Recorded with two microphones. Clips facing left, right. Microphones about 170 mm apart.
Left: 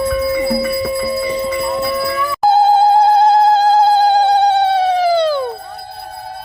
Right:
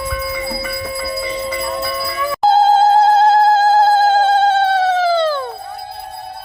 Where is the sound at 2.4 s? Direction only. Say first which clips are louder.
Even; 10° left (ahead or behind).